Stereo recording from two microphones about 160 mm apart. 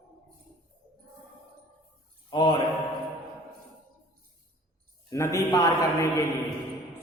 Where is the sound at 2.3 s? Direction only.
30° left (ahead or behind).